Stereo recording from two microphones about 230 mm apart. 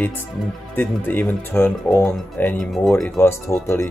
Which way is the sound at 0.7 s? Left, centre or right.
Centre.